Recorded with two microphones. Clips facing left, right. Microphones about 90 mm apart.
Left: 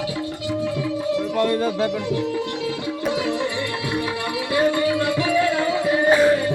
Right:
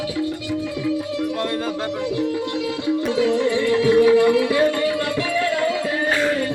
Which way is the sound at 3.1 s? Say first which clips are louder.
Right 7 dB; 15° left (ahead or behind).